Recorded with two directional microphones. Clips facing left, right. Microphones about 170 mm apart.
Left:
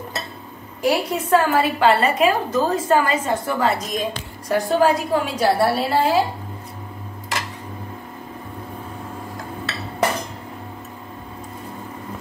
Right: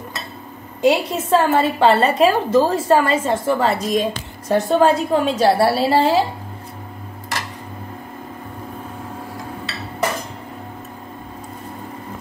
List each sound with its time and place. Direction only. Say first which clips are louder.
0.8 s a woman's voice: right 3 dB; 25° right (ahead or behind)